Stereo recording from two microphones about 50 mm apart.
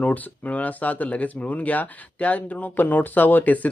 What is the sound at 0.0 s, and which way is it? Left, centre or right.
Speech, left.